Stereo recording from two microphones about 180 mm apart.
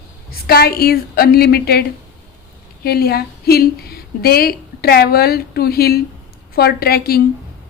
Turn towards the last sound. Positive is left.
turn(degrees=55)  # may be behind; listen again after turning